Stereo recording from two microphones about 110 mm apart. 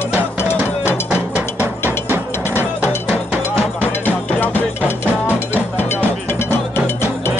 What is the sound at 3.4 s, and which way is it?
Music, 15° left (ahead or behind).